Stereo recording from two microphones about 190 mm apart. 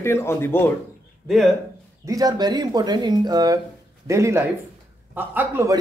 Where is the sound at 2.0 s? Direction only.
20° right (ahead or behind).